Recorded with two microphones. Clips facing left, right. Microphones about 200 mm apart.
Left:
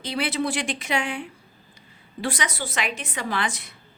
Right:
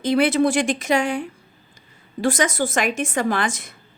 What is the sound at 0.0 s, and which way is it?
A woman's voice, 50° right (ahead or behind).